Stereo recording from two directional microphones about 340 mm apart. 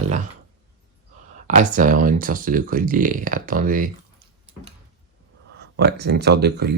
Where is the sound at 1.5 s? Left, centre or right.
Right.